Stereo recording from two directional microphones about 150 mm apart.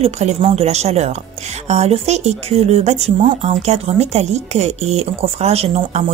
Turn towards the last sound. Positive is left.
turn(degrees=-45)  # may be behind; listen again after turning